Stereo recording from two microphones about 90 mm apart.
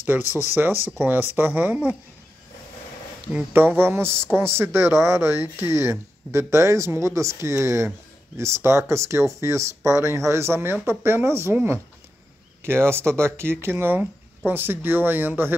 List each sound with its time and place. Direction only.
0.0 s speech: 20° right (ahead or behind)
3.5 s speech: 25° right (ahead or behind)
12.6 s speech: 25° right (ahead or behind)